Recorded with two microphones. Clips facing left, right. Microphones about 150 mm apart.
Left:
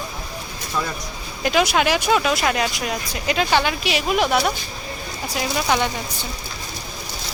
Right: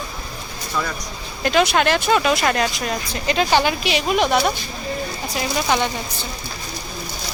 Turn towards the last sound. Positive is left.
turn(degrees=5)  # may be behind; listen again after turning